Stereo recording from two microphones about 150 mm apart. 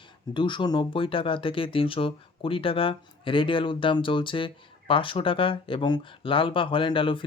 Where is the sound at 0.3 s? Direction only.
30° left (ahead or behind).